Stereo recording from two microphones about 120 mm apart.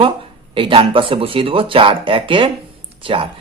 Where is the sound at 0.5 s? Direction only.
45° right (ahead or behind).